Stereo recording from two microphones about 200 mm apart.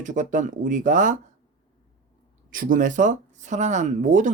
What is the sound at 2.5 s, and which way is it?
Speech, 40° right (ahead or behind).